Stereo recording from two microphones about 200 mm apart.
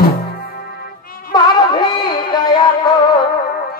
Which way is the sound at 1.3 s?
20° left (ahead or behind).